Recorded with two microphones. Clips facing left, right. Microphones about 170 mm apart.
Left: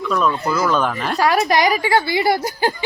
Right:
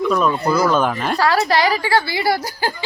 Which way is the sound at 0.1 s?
10° right (ahead or behind).